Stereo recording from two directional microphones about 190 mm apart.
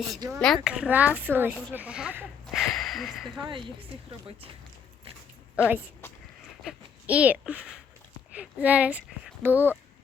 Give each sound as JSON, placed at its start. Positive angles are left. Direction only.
{"t": 0.3, "sound": "speech", "side_deg": 0}
{"t": 3.9, "sound": "a woman's voice", "side_deg": -30}
{"t": 5.6, "sound": "speech", "side_deg": -5}